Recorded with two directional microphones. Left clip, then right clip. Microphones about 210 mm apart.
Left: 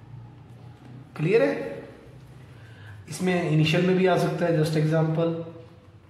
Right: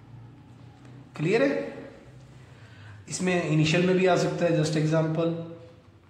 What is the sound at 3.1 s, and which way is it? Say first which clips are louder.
A man's voice: left 1 dB; 15° right (ahead or behind).